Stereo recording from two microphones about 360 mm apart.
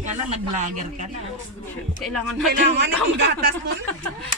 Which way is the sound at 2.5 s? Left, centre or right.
Right.